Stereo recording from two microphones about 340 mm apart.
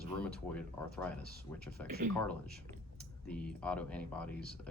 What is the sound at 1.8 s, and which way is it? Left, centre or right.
Speech, right.